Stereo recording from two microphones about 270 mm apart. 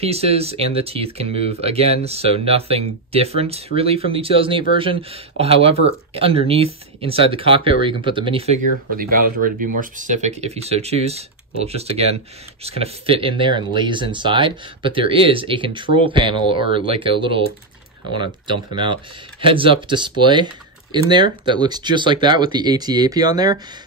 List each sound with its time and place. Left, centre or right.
0.0 s speech: right
8.9 s speech: right; by 23.6 s centre